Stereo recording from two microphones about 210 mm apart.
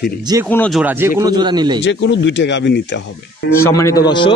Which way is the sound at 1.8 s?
60° left (ahead or behind).